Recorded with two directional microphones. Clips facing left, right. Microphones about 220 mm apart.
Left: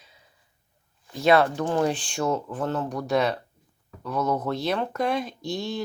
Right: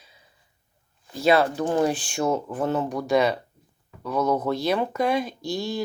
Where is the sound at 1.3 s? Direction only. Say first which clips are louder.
Even; 5° right (ahead or behind).